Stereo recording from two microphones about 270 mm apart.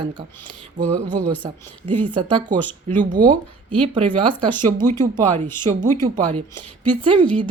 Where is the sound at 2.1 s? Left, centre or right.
Centre.